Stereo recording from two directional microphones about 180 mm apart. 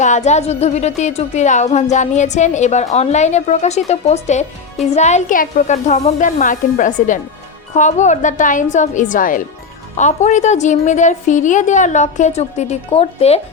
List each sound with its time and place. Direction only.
0.0 s a woman's voice: 40° left (ahead or behind)